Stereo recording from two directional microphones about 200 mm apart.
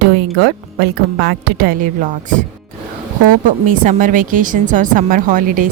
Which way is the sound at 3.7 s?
40° right (ahead or behind).